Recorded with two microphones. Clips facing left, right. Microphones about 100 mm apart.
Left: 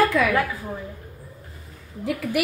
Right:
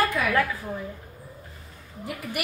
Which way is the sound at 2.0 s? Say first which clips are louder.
Left 8 dB; 90° left.